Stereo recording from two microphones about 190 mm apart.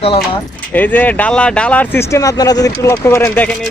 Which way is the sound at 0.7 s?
10° left (ahead or behind).